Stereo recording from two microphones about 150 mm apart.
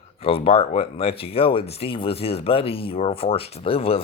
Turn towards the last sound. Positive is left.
turn(degrees=40)  # may be behind; listen again after turning